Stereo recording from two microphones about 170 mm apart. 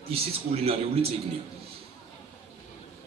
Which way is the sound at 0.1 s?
35° right (ahead or behind).